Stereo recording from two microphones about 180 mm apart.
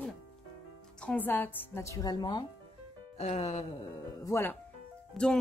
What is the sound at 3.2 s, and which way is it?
Music, 40° left (ahead or behind).